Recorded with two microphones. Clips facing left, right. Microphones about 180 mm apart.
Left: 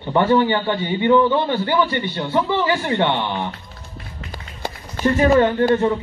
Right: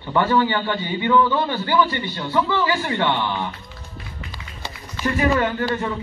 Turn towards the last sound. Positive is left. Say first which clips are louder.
# left 7 dB
turn(degrees=25)  # may be behind; listen again after turning